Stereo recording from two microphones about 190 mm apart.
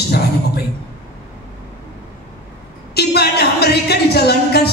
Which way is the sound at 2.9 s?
55° left (ahead or behind).